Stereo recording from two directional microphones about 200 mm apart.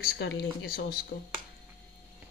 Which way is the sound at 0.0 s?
55° left (ahead or behind).